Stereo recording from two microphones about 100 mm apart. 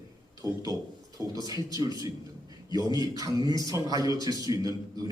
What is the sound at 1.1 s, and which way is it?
Speech, 40° right (ahead or behind).